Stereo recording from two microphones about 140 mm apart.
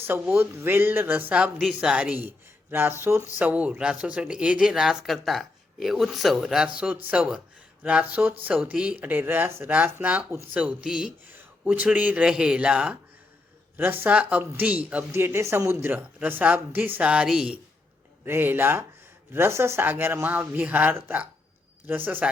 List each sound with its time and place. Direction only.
0.1 s speech: 15° right (ahead or behind)
18.3 s speech: 15° right (ahead or behind)